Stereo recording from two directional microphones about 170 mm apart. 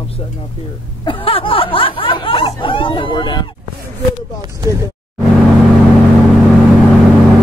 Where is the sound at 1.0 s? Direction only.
30° left (ahead or behind).